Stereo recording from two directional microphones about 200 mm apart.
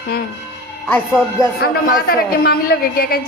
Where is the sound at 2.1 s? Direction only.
50° left (ahead or behind).